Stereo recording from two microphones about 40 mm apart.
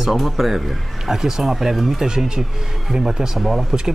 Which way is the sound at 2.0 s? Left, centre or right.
Centre.